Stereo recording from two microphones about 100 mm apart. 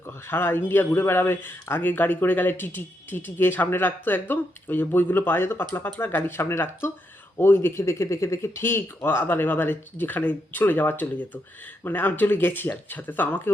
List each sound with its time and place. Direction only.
0.3 s speech: 20° left (ahead or behind)